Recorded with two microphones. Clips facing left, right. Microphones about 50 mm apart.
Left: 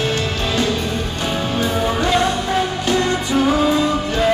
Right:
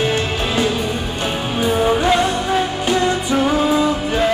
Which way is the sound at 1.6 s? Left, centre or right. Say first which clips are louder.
Right 5 dB; centre.